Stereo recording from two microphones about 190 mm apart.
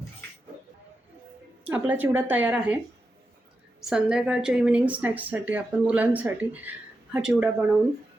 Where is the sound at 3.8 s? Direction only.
5° right (ahead or behind).